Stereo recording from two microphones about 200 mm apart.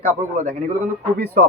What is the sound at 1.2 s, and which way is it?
Speech, 50° right (ahead or behind).